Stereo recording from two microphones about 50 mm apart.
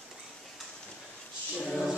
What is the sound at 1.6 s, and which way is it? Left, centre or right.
Choir, centre.